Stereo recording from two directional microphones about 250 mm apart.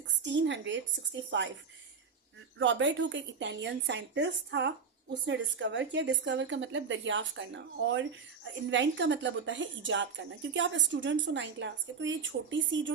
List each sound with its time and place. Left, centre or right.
0.2 s a woman's voice: right
2.6 s a woman's voice: right